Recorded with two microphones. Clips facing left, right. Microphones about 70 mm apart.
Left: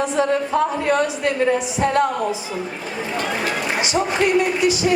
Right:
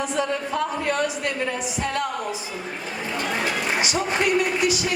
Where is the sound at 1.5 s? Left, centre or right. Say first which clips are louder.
Left 8 dB; left.